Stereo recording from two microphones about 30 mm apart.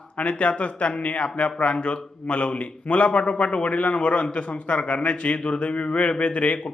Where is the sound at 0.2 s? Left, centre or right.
Left.